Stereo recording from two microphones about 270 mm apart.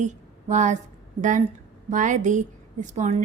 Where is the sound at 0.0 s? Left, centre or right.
Right.